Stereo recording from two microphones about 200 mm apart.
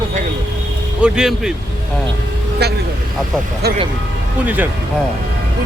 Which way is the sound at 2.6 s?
55° right (ahead or behind).